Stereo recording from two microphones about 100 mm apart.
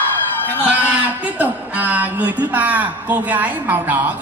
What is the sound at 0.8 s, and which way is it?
A man's voice, 15° right (ahead or behind).